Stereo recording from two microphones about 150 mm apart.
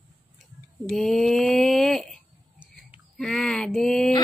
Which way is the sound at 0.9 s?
Centre (ahead or behind).